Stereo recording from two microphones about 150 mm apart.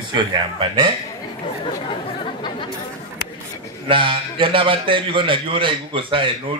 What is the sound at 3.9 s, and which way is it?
Speech, 35° right (ahead or behind).